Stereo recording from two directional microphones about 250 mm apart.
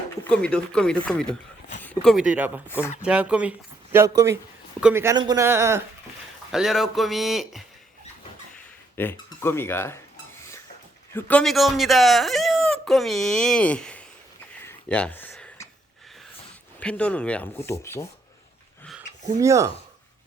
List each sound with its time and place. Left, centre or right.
0.3 s speech: centre
2.6 s speech: centre
3.0 s speech: centre
9.0 s speech: centre
11.1 s speech: centre
14.6 s a sound: centre
16.8 s speech: centre
19.4 s speech: centre